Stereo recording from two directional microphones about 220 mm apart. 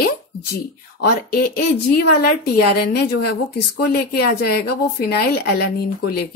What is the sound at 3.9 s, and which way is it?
Speech, 45° left (ahead or behind).